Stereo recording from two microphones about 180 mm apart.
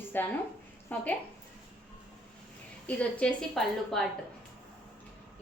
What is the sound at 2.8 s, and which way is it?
A woman's voice, 5° left (ahead or behind).